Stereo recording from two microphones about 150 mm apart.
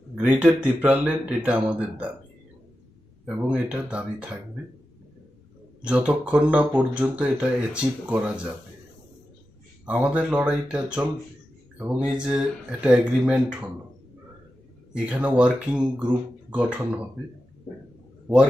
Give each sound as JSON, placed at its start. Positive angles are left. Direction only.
{"t": 0.2, "sound": "speech", "side_deg": -10}
{"t": 3.2, "sound": "speech", "side_deg": -5}
{"t": 5.8, "sound": "speech", "side_deg": -5}
{"t": 9.8, "sound": "speech", "side_deg": -10}
{"t": 12.0, "sound": "speech", "side_deg": -5}
{"t": 14.9, "sound": "speech", "side_deg": -10}